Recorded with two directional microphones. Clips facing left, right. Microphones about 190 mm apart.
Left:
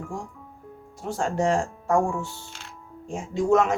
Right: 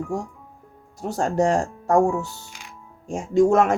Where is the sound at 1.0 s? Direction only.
40° right (ahead or behind).